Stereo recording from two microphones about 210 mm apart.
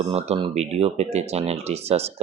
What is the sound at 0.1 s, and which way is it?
Speech, 30° right (ahead or behind).